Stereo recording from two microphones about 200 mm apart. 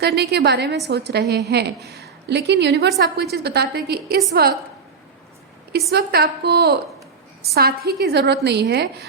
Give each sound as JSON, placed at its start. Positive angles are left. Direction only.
{"t": 0.0, "sound": "a woman's voice", "side_deg": -55}
{"t": 5.9, "sound": "a woman's voice", "side_deg": -55}